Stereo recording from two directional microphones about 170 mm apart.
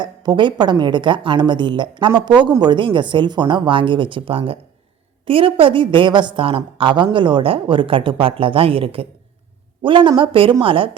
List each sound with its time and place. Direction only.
0.0 s a woman's voice: 25° right (ahead or behind)